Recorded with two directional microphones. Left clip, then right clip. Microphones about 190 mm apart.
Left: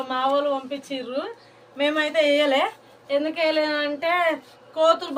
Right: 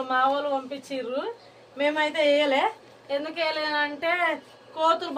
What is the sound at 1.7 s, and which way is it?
A woman's voice, 15° right (ahead or behind).